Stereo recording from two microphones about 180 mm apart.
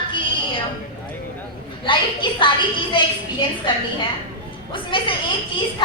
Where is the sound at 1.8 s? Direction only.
25° left (ahead or behind).